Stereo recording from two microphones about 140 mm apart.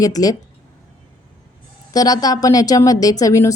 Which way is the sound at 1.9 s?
25° left (ahead or behind).